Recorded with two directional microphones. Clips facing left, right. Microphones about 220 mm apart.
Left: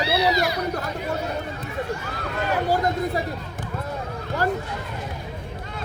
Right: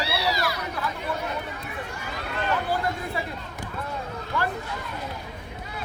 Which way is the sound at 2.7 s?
40° left (ahead or behind).